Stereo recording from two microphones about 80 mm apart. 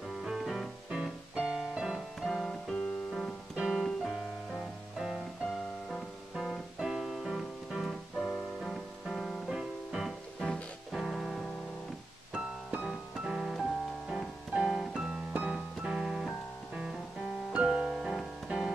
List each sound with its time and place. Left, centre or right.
0.2 s music: centre
0.8 s music: centre
3.5 s music: centre
12.7 s piano: centre
15.3 s music: centre
17.5 s piano: centre